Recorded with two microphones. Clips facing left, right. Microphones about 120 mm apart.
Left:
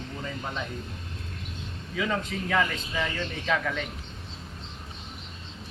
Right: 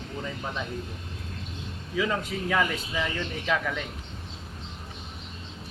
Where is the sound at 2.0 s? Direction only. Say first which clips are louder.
Right 1 dB; 5° right (ahead or behind).